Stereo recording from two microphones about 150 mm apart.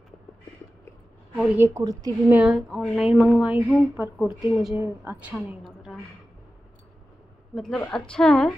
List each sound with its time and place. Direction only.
1.6 s a woman's voice: 20° right (ahead or behind)
2.3 s speech: 5° right (ahead or behind)
4.7 s a woman's voice: 20° right (ahead or behind)
5.6 s a sound: centre (ahead or behind)
7.5 s speech: 5° left (ahead or behind)